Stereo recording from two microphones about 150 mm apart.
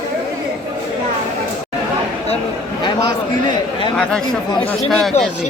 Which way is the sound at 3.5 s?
30° left (ahead or behind).